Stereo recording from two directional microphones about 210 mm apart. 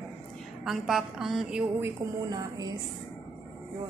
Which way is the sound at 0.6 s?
Centre (ahead or behind).